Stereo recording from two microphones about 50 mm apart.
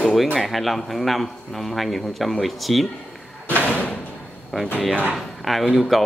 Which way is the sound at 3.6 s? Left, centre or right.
Left.